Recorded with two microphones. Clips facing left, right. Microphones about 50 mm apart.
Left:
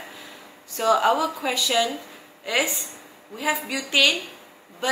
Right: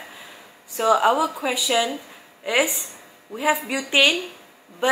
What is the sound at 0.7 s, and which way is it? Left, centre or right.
A woman's voice, centre.